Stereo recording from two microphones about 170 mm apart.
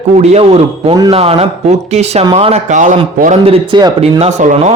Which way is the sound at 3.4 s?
30° right (ahead or behind).